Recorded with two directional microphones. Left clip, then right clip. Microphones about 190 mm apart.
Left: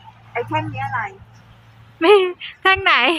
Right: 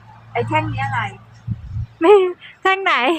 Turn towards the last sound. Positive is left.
turn(degrees=-10)  # may be behind; listen again after turning